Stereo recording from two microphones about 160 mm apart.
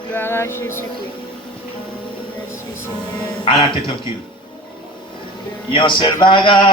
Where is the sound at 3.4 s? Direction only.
30° left (ahead or behind).